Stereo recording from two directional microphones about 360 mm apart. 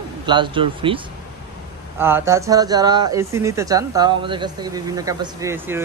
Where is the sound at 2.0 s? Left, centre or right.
Centre.